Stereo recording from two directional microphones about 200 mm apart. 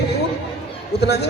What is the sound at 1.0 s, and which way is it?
Speech, 55° left (ahead or behind).